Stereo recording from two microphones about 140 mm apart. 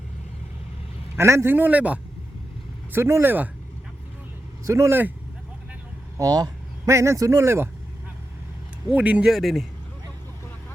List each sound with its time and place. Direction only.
1.1 s a man's voice: 20° right (ahead or behind)
4.6 s a man's voice: 20° right (ahead or behind)
6.1 s speech: 30° right (ahead or behind)
8.9 s a man's voice: 10° right (ahead or behind)